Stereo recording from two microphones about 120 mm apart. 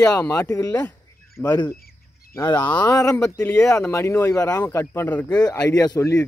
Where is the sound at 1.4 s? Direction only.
20° left (ahead or behind).